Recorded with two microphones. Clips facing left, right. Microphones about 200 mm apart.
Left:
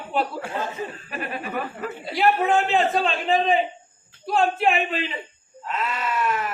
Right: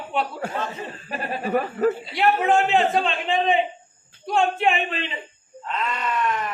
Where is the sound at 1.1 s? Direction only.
35° right (ahead or behind).